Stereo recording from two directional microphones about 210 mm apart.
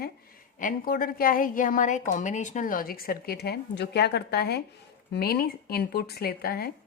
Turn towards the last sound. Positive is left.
turn(degrees=45)  # may be behind; listen again after turning